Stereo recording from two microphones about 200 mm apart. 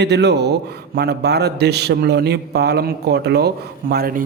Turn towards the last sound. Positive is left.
turn(degrees=-50)  # may be behind; listen again after turning